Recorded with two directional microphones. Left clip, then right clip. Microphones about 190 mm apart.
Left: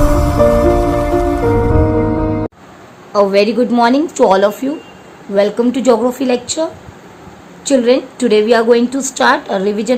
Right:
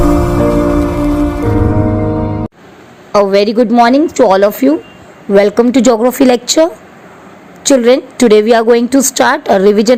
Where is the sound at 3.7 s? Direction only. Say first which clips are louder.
Right 4 dB; 20° right (ahead or behind).